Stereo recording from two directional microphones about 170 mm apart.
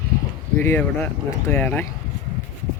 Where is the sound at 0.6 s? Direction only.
15° left (ahead or behind).